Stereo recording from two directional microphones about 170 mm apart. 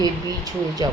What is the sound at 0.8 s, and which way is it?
Speech, 20° right (ahead or behind).